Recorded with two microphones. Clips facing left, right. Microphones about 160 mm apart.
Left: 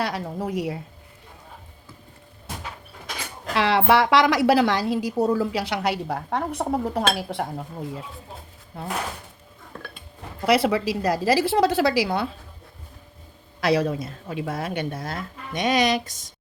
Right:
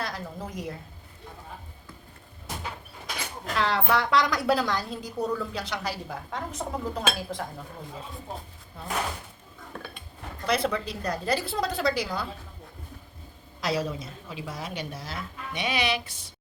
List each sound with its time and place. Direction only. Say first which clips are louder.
0.0 s a woman's voice: left 7 dB; 70° left (ahead or behind)
3.5 s a woman's voice: left 6 dB; 80° left; by 7.4 s 65° left (ahead or behind)
10.4 s a woman's voice: left 7 dB; 75° left (ahead or behind)
13.6 s speech: left 7 dB; 65° left (ahead or behind); by 16.3 s 45° left (ahead or behind)